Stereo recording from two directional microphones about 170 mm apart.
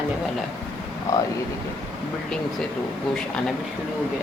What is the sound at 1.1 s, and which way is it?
Speech, 15° left (ahead or behind).